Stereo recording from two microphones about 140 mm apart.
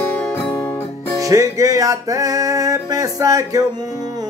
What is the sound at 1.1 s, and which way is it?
Music, 25° right (ahead or behind).